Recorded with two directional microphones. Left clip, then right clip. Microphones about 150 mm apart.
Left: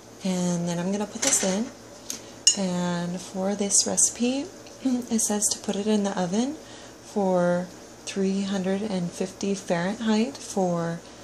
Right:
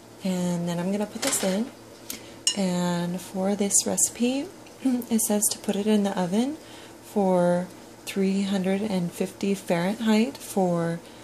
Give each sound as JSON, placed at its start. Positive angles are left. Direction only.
{"t": 0.2, "sound": "speech", "side_deg": -5}
{"t": 2.5, "sound": "speech", "side_deg": -15}